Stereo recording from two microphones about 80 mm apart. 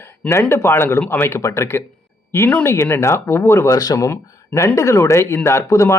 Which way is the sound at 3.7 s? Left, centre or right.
Left.